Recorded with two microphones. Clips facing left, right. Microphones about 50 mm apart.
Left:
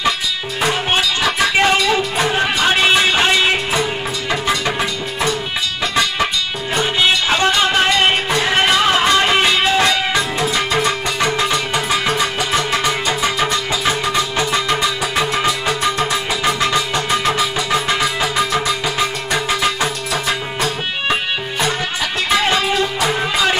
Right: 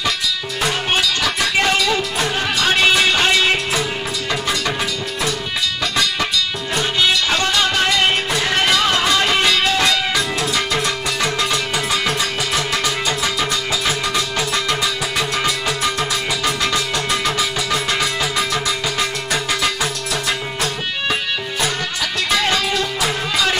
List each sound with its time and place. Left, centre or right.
0.9 s music: left
7.0 s music: left
9.8 s music: centre
18.0 s music: centre
22.3 s music: left